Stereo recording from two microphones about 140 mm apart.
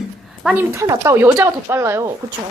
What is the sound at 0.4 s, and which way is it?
Speech, 15° right (ahead or behind).